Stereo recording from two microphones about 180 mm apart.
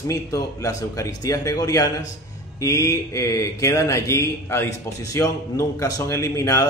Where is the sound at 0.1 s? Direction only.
20° left (ahead or behind).